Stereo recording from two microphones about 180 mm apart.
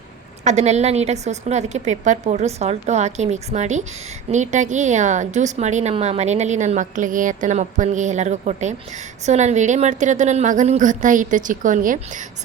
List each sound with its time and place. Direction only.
0.4 s a woman's voice: 40° right (ahead or behind)